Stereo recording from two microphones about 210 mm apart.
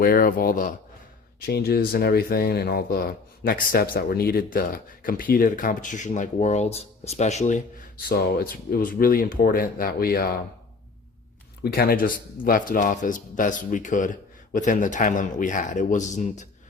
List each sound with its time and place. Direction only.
0.0 s speech: 45° left (ahead or behind)
11.6 s speech: 45° left (ahead or behind)